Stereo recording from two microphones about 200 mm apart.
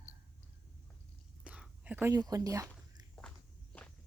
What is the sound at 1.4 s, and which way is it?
Whispering, 5° right (ahead or behind).